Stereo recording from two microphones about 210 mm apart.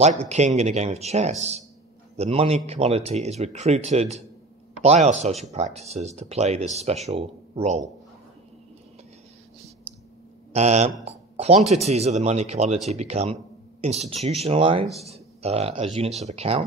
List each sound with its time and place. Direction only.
0.0 s speech: 30° right (ahead or behind)
10.5 s speech: 30° right (ahead or behind)